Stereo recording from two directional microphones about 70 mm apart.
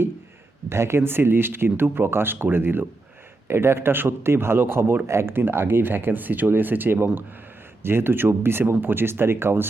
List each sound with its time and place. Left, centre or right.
0.7 s speech: right